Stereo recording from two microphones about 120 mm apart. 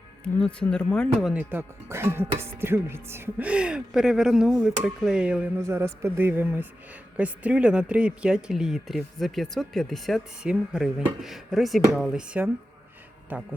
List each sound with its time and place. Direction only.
0.3 s speech: 10° left (ahead or behind)
1.2 s speech: 10° right (ahead or behind)
5.5 s speech: 20° right (ahead or behind)